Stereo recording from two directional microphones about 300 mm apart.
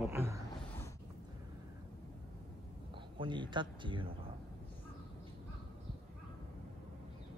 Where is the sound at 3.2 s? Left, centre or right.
Centre.